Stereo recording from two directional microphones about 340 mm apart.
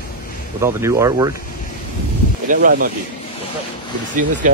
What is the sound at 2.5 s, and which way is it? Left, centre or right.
Speech, right.